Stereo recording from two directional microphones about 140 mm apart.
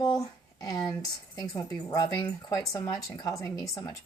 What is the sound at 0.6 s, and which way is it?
Speech, 25° left (ahead or behind).